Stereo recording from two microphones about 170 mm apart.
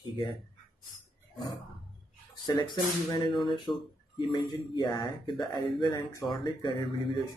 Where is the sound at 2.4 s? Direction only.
25° left (ahead or behind).